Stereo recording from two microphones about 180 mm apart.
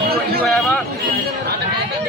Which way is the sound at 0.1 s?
60° right (ahead or behind).